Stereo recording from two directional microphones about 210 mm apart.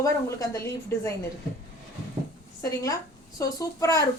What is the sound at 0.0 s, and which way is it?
A woman's voice, 15° left (ahead or behind).